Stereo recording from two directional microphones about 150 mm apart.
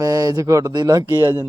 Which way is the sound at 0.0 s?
25° right (ahead or behind).